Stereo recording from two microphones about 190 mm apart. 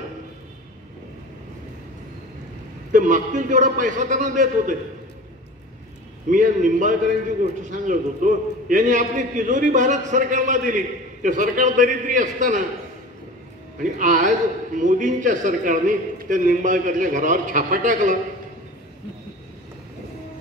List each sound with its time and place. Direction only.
2.9 s a man's voice: 45° right (ahead or behind)
6.3 s a man's voice: 45° right (ahead or behind)
13.7 s a man's voice: 45° right (ahead or behind)